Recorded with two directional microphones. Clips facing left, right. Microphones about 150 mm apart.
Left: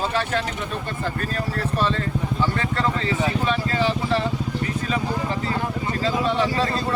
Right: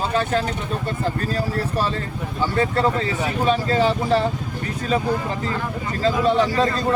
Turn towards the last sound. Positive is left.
turn(degrees=-40)  # may be behind; listen again after turning